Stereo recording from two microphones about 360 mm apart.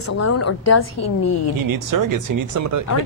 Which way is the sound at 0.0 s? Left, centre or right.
Left.